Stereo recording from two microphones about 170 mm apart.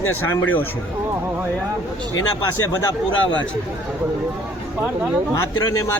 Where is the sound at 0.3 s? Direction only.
10° left (ahead or behind).